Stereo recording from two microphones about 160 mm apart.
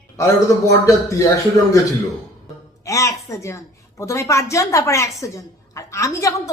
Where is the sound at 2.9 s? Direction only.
20° left (ahead or behind).